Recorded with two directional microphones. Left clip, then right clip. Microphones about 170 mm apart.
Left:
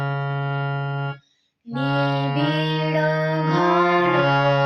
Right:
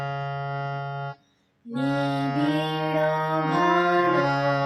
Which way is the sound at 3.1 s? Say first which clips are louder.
Left 2 dB; 30° left (ahead or behind).